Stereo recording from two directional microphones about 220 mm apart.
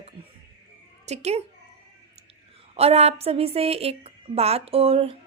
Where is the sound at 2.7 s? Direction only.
30° right (ahead or behind).